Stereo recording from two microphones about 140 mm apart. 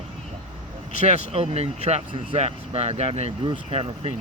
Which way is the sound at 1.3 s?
45° right (ahead or behind).